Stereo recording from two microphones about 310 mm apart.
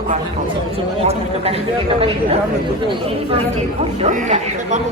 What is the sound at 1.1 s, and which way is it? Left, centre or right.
Speech, centre.